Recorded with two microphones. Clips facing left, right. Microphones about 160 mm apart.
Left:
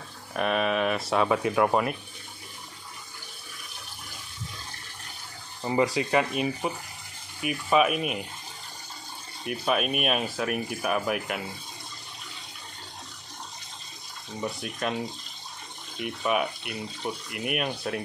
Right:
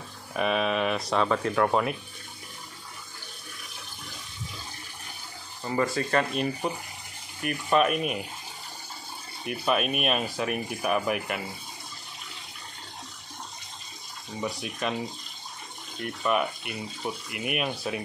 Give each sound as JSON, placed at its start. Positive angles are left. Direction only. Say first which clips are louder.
{"t": 0.3, "sound": "speech", "louder": "even", "side_deg": 0}
{"t": 5.6, "sound": "speech", "louder": "left 2 dB", "side_deg": 15}
{"t": 9.4, "sound": "speech", "louder": "even", "side_deg": 0}
{"t": 14.3, "sound": "speech", "louder": "even", "side_deg": 0}